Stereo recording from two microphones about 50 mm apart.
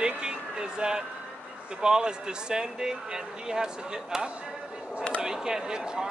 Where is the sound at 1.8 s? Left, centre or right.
Centre.